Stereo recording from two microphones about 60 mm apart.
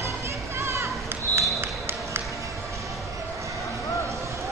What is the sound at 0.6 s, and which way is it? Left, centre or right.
Children playing, right.